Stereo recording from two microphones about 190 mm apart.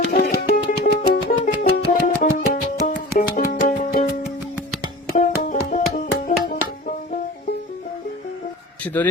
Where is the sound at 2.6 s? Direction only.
45° left (ahead or behind).